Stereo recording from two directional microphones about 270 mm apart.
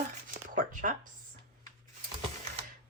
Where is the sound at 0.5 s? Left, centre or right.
Right.